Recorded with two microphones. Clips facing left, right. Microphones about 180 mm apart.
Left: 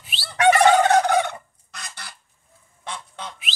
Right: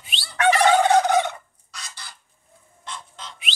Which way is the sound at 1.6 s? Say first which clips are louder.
Left 1 dB; 55° left (ahead or behind).